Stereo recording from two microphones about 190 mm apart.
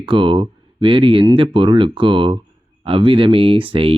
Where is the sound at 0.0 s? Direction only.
25° right (ahead or behind).